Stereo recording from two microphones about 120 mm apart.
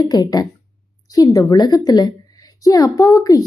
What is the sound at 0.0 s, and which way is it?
A woman's voice, 35° left (ahead or behind).